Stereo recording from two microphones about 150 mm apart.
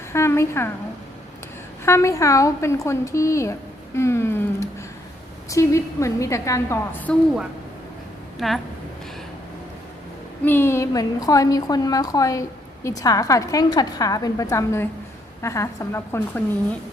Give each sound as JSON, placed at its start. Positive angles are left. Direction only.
{"t": 0.1, "sound": "a woman's voice", "side_deg": 20}
{"t": 1.8, "sound": "a woman's voice", "side_deg": 20}
{"t": 8.4, "sound": "a woman's voice", "side_deg": 0}
{"t": 10.4, "sound": "a woman's voice", "side_deg": 15}